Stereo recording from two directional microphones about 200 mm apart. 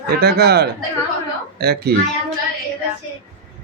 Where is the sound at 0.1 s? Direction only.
55° right (ahead or behind).